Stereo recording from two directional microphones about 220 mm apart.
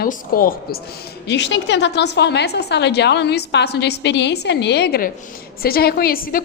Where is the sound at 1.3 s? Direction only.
55° left (ahead or behind).